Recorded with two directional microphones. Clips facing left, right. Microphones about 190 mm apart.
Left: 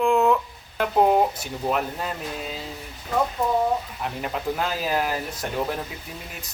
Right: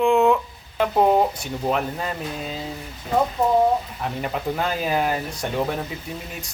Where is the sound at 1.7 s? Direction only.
Centre (ahead or behind).